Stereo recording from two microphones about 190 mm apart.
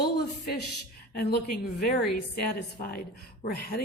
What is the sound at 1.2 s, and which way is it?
A woman's voice, 50° left (ahead or behind).